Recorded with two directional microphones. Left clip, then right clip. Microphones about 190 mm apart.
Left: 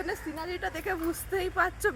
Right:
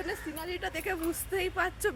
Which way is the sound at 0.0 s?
5° right (ahead or behind).